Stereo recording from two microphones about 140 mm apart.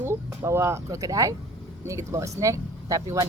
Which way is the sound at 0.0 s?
20° right (ahead or behind).